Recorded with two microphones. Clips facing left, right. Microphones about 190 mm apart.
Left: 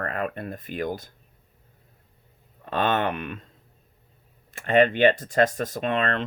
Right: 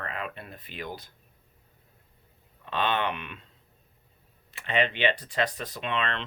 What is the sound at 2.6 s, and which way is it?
Speech, 45° left (ahead or behind).